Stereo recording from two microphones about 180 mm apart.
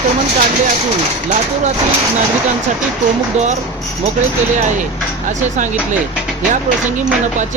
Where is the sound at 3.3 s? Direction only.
40° right (ahead or behind).